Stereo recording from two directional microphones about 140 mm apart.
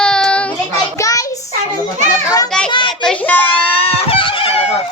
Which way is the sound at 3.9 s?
40° left (ahead or behind).